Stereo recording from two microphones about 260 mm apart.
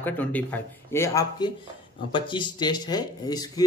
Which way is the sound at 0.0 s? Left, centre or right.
Centre.